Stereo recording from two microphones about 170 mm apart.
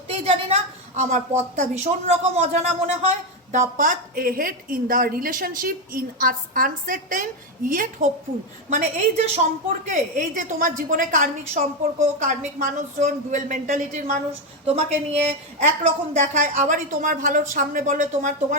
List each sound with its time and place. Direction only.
0.1 s a woman's voice: 35° right (ahead or behind)
3.8 s a woman's voice: 55° right (ahead or behind)
8.7 s a woman's voice: 40° right (ahead or behind)
15.3 s a woman's voice: 40° right (ahead or behind)